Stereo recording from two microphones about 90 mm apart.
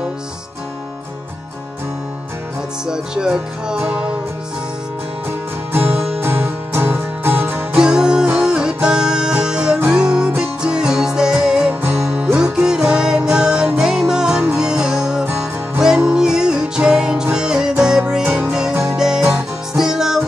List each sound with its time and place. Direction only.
2.9 s music: 10° right (ahead or behind)
5.7 s music: 25° right (ahead or behind)
7.7 s music: 10° right (ahead or behind)